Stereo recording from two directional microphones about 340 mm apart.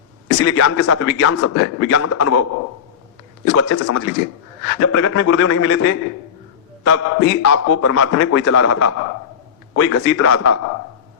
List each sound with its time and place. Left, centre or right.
0.3 s a man's voice: left